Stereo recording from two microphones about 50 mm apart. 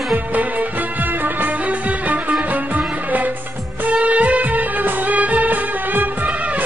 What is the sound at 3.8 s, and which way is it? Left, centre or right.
Music, right.